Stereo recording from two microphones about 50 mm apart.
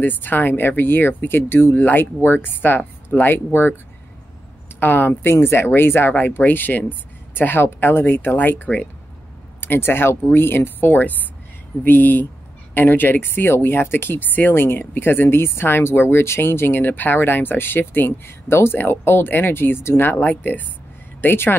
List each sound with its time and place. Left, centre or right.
0.0 s speech: left
4.7 s speech: left
7.6 s speech: left
16.7 s speech: left